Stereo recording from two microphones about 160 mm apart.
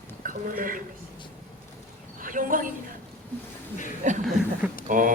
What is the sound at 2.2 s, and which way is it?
Speech, 55° right (ahead or behind).